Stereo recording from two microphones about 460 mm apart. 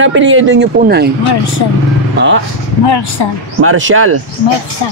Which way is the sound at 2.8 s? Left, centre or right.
Left.